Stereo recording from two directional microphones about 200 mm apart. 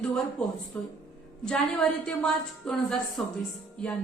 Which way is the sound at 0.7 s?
10° left (ahead or behind).